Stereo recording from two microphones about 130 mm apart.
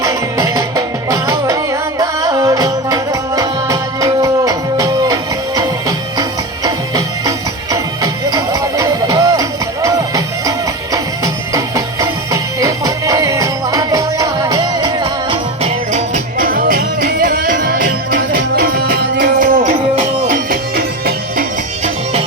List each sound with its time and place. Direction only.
0.0 s music: 25° right (ahead or behind)
6.7 s music: 25° right (ahead or behind)
11.5 s music: 25° right (ahead or behind)
15.9 s music: 65° right (ahead or behind); by 17.8 s 90° right
19.4 s music: 75° right (ahead or behind)
20.2 s music: 90° right